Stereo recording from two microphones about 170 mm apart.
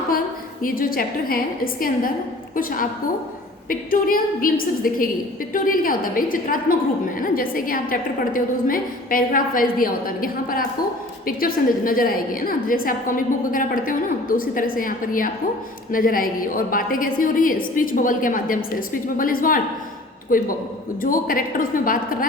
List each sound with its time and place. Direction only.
0.6 s a woman's voice: 55° left (ahead or behind)
3.7 s a woman's voice: 55° left (ahead or behind)